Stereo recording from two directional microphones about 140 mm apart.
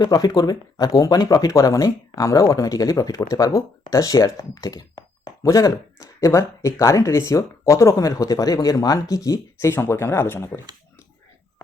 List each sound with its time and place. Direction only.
0.0 s speech: 25° left (ahead or behind)